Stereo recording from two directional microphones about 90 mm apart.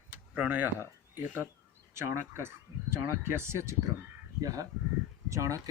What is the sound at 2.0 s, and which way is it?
Speech, 30° right (ahead or behind).